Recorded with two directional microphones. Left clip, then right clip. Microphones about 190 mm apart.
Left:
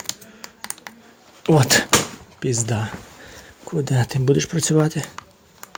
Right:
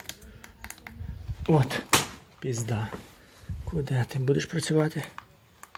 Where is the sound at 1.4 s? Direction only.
30° left (ahead or behind).